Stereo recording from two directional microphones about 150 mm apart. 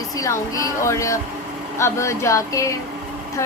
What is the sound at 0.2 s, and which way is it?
A woman's voice, 20° left (ahead or behind).